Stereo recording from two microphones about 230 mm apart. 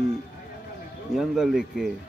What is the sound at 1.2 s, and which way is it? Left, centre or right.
Speech, centre.